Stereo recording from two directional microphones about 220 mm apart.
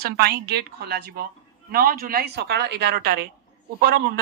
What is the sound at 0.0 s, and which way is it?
A man's voice, 45° right (ahead or behind).